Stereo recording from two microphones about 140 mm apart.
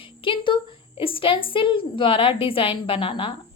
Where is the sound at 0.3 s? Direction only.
35° left (ahead or behind).